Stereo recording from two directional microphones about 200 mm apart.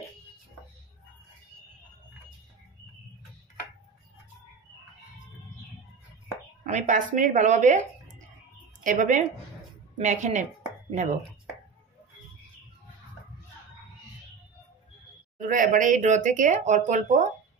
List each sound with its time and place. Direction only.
6.6 s speech: 35° right (ahead or behind)
15.4 s speech: 40° right (ahead or behind)